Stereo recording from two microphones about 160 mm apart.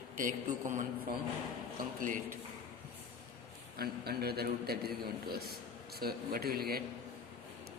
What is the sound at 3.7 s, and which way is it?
A man's voice, 75° right (ahead or behind).